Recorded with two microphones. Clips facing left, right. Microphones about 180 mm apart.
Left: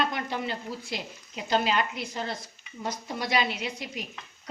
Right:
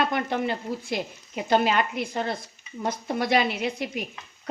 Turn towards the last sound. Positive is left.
turn(degrees=-55)  # may be behind; listen again after turning